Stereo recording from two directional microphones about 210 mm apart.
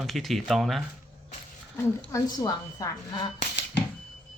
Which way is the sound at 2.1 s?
15° left (ahead or behind).